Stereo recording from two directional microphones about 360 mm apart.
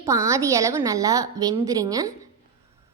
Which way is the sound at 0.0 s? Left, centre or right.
Centre.